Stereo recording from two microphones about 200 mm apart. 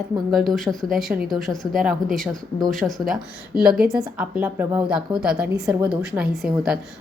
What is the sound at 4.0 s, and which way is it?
A woman's voice, 5° right (ahead or behind).